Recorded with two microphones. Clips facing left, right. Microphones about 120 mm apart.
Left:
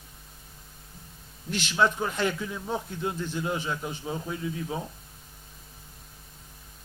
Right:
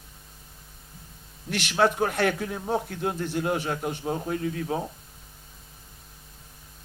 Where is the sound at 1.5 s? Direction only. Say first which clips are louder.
Right 2 dB; 60° right (ahead or behind).